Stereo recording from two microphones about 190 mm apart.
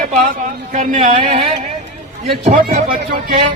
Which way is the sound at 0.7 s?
40° right (ahead or behind).